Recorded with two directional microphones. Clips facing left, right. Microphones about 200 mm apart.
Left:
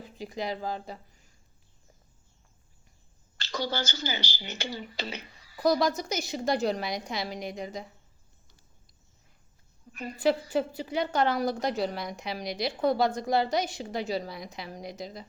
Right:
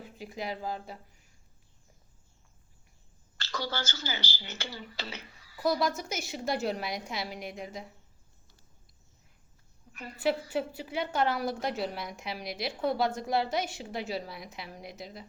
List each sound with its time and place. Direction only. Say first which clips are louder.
0.2 s a woman's voice: left 4 dB; 5° right (ahead or behind)
3.3 s speech: left 4 dB; 15° left (ahead or behind)
6.0 s a woman's voice: left 4 dB; 5° right (ahead or behind)
9.9 s a woman's voice: left 6 dB; 15° left (ahead or behind)
10.5 s a woman's voice: left 4 dB; 5° right (ahead or behind)